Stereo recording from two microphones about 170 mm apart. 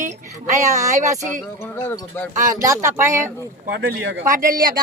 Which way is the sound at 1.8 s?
15° left (ahead or behind).